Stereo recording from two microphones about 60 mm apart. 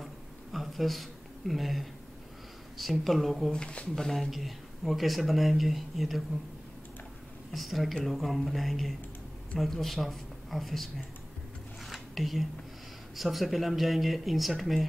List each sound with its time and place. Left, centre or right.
0.0 s a sound: centre
1.5 s speech: centre
3.5 s speech: centre
3.9 s speech: centre
7.5 s speech: centre
11.8 s a sound: centre
13.1 s speech: centre